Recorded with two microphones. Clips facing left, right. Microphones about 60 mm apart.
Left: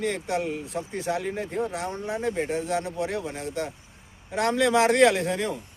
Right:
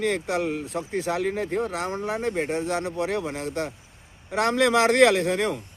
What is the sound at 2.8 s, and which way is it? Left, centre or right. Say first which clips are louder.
Speech: right 3 dB; right.